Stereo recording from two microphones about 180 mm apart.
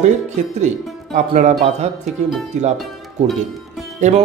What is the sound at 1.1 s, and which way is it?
Speech, 40° right (ahead or behind).